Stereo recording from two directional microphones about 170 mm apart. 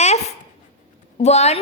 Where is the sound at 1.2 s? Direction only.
40° left (ahead or behind).